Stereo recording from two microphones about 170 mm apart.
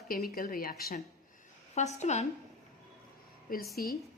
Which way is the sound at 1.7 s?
40° left (ahead or behind).